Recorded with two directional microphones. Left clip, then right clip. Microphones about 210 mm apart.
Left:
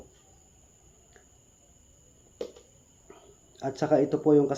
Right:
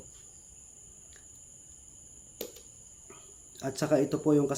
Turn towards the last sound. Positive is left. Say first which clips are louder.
# left 4 dB
turn(degrees=-25)  # may be behind; listen again after turning